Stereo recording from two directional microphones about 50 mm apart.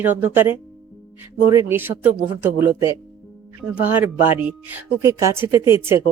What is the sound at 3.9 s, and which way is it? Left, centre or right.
Speech, right.